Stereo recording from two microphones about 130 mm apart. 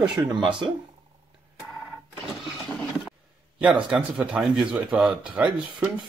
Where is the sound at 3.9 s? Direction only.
10° right (ahead or behind).